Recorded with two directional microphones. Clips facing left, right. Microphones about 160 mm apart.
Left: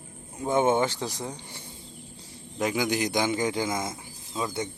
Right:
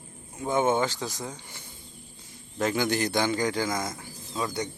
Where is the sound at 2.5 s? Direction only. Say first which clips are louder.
Even; 15° left (ahead or behind).